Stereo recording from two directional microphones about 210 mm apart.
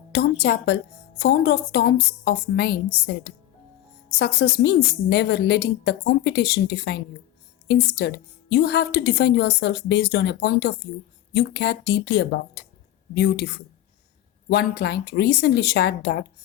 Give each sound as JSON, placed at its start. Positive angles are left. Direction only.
{"t": 0.1, "sound": "a woman's voice", "side_deg": 50}